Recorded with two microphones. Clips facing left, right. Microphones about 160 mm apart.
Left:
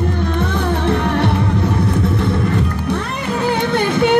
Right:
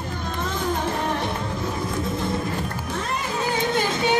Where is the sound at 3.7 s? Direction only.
60° left (ahead or behind).